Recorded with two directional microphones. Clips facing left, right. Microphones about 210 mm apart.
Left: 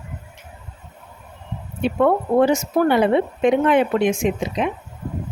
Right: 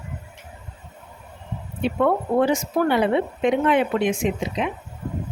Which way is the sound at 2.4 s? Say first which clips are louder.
Left 4 dB; 45° left (ahead or behind).